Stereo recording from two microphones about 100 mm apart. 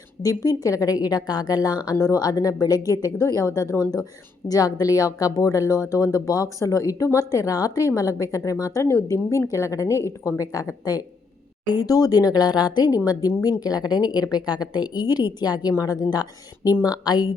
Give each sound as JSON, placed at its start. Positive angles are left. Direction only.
{"t": 0.2, "sound": "a woman's voice", "side_deg": 35}